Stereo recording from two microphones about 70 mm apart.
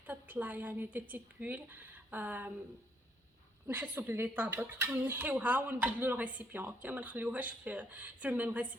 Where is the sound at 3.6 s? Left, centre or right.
Right.